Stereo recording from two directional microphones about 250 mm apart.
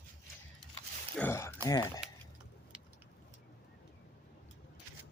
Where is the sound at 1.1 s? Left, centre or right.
Centre.